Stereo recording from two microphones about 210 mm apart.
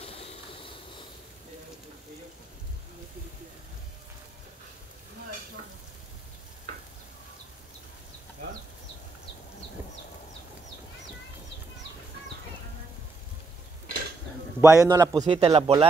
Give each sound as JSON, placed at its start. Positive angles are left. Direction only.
{"t": 0.0, "sound": "vehicle", "side_deg": 25}
{"t": 14.6, "sound": "a man's voice", "side_deg": -15}
{"t": 15.3, "sound": "speech", "side_deg": -25}